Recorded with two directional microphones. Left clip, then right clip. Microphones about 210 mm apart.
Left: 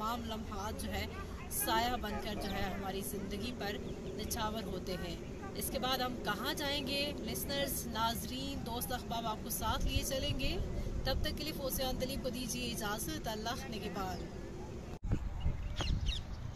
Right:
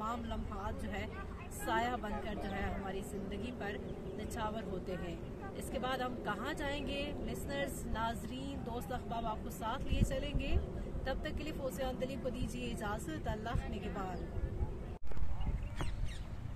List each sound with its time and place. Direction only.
0.0 s speech: centre (ahead or behind)